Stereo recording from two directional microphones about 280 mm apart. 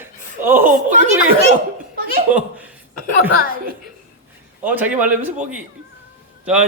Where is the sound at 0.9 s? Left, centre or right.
Right.